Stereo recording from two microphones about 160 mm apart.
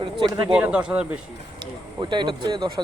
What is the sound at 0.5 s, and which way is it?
Speech, 5° right (ahead or behind).